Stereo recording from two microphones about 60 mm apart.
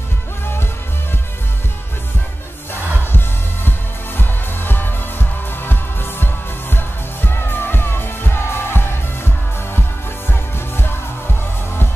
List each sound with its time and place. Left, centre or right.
2.7 s music: left